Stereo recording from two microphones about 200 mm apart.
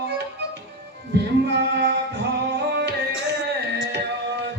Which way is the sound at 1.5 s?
55° right (ahead or behind).